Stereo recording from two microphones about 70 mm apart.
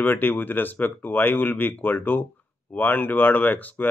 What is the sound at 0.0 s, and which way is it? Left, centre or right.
Speech, left.